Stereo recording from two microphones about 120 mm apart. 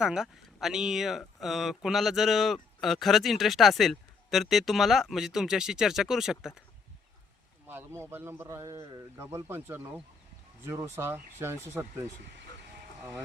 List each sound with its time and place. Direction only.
0.0 s speech: 5° right (ahead or behind)
7.7 s a man's voice: 20° right (ahead or behind)